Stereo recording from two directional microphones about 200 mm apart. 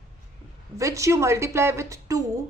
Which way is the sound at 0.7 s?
15° right (ahead or behind).